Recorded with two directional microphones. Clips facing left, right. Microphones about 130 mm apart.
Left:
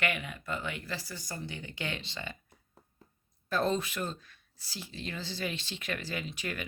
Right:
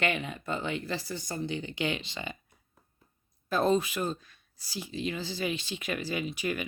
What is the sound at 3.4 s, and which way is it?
Speech, 15° right (ahead or behind).